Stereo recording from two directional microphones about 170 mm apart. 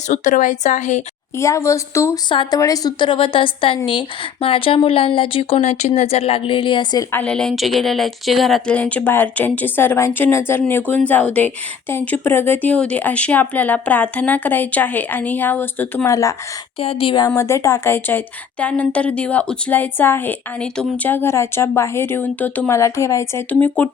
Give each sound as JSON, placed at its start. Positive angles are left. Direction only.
{"t": 0.1, "sound": "a woman's voice", "side_deg": 50}
{"t": 1.4, "sound": "speech", "side_deg": 20}
{"t": 2.3, "sound": "a woman's voice", "side_deg": 30}
{"t": 7.1, "sound": "speech", "side_deg": 10}
{"t": 16.8, "sound": "speech", "side_deg": 35}
{"t": 17.2, "sound": "speech", "side_deg": 15}